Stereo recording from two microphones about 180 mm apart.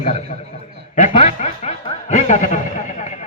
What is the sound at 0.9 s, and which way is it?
Chuckle, 40° left (ahead or behind).